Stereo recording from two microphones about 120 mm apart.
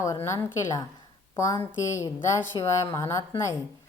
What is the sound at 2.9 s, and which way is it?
Speech, 25° left (ahead or behind).